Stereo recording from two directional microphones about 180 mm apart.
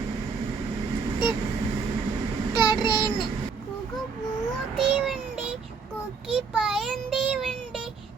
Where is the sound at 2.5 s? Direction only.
25° left (ahead or behind).